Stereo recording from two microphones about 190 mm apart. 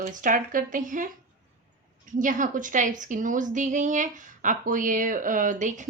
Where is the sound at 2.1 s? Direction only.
45° right (ahead or behind).